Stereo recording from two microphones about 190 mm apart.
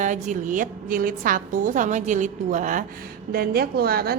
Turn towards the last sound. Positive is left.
turn(degrees=-55)  # may be behind; listen again after turning